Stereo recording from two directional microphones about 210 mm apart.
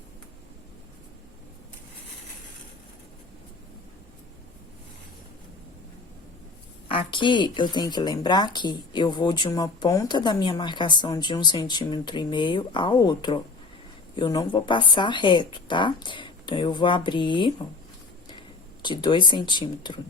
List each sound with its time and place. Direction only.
6.8 s speech: 25° left (ahead or behind)
18.8 s speech: 20° left (ahead or behind)